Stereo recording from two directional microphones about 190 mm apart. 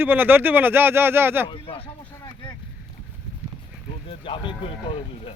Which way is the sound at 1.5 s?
30° left (ahead or behind).